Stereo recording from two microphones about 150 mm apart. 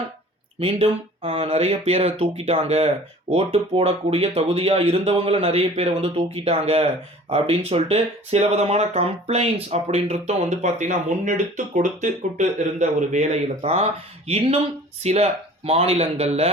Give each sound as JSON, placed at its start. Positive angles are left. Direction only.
{"t": 0.6, "sound": "speech", "side_deg": -40}